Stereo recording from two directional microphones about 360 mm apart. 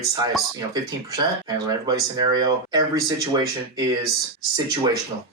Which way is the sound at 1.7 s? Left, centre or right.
Centre.